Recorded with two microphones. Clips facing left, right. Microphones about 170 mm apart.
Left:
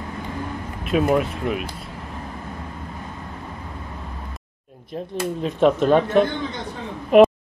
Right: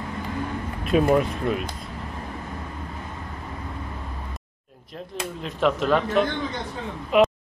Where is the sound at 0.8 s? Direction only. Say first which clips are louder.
Even; centre (ahead or behind).